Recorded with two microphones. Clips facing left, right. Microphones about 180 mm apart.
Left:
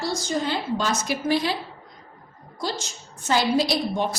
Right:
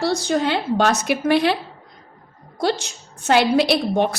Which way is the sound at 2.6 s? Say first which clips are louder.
Right 8 dB; 65° right (ahead or behind).